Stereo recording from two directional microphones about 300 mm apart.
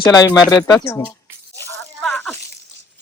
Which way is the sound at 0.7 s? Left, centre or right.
Centre.